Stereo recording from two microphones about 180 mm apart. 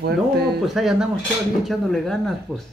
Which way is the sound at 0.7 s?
Centre (ahead or behind).